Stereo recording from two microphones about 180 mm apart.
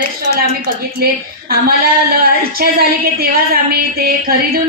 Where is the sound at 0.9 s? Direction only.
55° right (ahead or behind).